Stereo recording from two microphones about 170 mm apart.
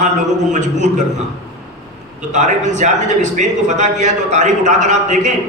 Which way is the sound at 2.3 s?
45° right (ahead or behind).